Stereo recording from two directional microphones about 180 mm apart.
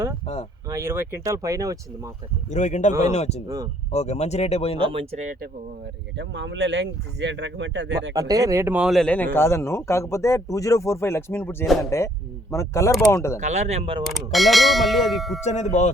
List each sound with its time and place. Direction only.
0.7 s speech: 15° right (ahead or behind)
2.5 s speech: 40° left (ahead or behind)
4.9 s speech: 35° right (ahead or behind)
6.1 s speech: 80° right
8.1 s speech: 20° right (ahead or behind); by 13.4 s 15° left (ahead or behind)
13.4 s speech: 40° right (ahead or behind)
14.0 s speech: centre (ahead or behind)
15.4 s speech: 40° left (ahead or behind)